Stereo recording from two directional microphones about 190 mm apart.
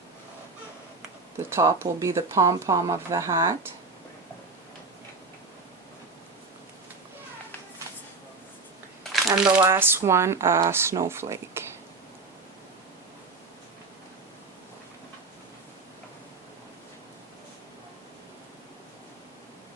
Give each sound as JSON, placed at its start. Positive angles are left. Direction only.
{"t": 1.5, "sound": "speech", "side_deg": -15}
{"t": 9.2, "sound": "speech", "side_deg": -15}